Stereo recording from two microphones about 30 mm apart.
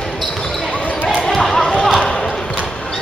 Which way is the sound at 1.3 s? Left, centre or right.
Centre.